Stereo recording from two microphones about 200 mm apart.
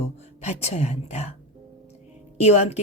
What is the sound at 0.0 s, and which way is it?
A woman's voice, 35° left (ahead or behind).